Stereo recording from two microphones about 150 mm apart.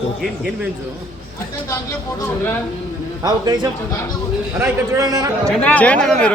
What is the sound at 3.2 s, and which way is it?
A man's voice, 25° right (ahead or behind).